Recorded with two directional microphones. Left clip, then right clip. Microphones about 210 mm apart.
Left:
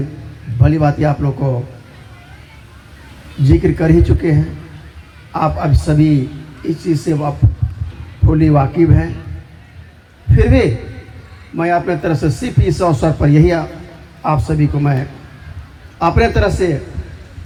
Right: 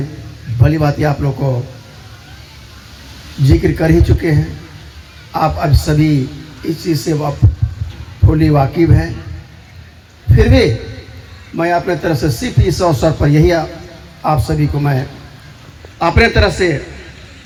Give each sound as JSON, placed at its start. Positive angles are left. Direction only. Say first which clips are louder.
{"t": 0.6, "sound": "speech", "louder": "even", "side_deg": -15}
{"t": 3.4, "sound": "speech", "louder": "even", "side_deg": -15}
{"t": 8.3, "sound": "speech", "louder": "even", "side_deg": -15}
{"t": 10.3, "sound": "speech", "louder": "right 2 dB", "side_deg": -10}
{"t": 16.0, "sound": "speech", "louder": "right 2 dB", "side_deg": -15}